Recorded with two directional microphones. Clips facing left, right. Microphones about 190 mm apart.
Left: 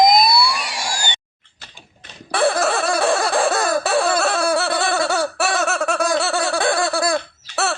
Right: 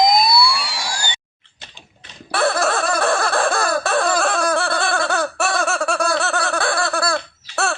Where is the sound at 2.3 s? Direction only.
15° left (ahead or behind).